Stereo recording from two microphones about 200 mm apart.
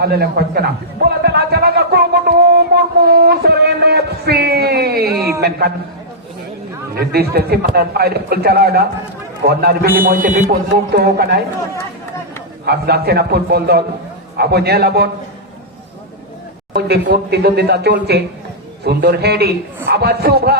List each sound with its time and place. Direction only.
0.0 s a man's voice: 50° right (ahead or behind)
1.0 s a sound: 55° right (ahead or behind)
5.4 s a man's voice: 50° right (ahead or behind)
6.9 s a man's voice: 50° right (ahead or behind)
12.6 s a man's voice: 50° right (ahead or behind)
16.7 s a man's voice: 55° right (ahead or behind)